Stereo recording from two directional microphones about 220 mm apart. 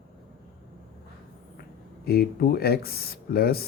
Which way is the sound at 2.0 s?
45° left (ahead or behind).